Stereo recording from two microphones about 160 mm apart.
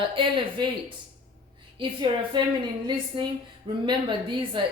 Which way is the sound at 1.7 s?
30° right (ahead or behind).